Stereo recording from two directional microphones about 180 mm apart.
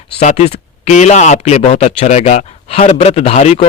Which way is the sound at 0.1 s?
40° left (ahead or behind).